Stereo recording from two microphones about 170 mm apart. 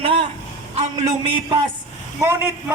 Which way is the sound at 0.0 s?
30° right (ahead or behind).